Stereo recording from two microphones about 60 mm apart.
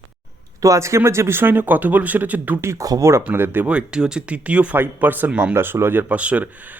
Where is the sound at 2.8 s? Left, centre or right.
Right.